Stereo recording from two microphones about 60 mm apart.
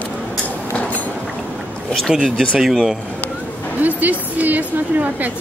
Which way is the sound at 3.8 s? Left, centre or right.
Right.